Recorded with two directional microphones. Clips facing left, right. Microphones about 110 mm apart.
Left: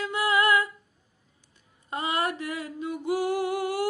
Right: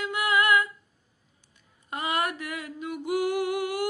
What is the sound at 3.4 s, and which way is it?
Humming, 25° left (ahead or behind).